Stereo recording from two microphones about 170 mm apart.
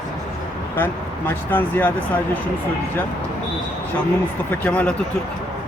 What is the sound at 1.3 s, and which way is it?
Speech, 10° left (ahead or behind).